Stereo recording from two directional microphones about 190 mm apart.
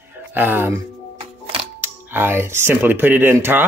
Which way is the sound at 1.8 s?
10° right (ahead or behind).